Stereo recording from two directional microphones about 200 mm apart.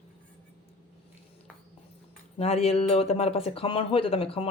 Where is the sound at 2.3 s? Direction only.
30° left (ahead or behind).